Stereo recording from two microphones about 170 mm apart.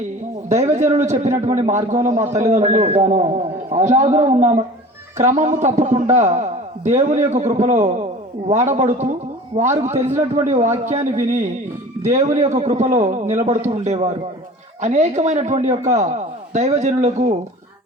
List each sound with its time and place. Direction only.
0.5 s a man's voice: 40° right (ahead or behind)